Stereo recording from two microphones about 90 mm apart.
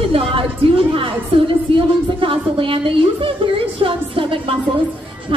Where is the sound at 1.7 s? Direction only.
70° right (ahead or behind).